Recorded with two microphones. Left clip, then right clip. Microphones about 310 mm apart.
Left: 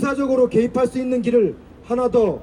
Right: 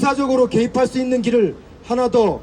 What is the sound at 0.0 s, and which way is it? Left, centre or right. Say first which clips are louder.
A man's voice: right 2 dB; centre.